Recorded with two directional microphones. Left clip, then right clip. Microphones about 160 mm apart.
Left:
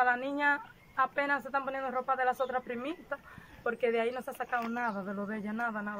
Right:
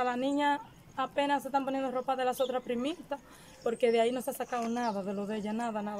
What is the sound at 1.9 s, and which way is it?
Speech, 30° right (ahead or behind).